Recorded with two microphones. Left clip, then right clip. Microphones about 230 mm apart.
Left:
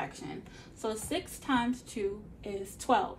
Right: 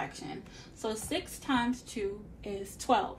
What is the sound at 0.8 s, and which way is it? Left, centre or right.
A woman's voice, left.